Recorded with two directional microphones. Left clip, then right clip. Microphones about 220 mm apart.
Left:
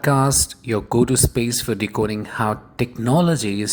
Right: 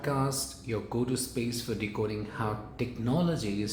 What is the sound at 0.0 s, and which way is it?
Speech, 45° left (ahead or behind).